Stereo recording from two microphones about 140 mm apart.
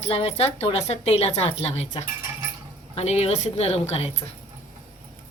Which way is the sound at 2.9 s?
50° left (ahead or behind).